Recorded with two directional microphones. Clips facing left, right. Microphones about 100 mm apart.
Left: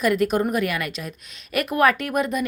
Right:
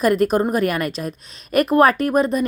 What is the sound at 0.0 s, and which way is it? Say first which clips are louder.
Speech: right 3 dB; 40° right (ahead or behind).